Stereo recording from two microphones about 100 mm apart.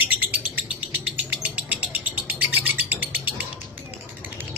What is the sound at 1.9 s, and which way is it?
Bird, 15° right (ahead or behind).